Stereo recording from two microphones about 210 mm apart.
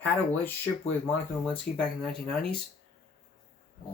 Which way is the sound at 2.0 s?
Centre (ahead or behind).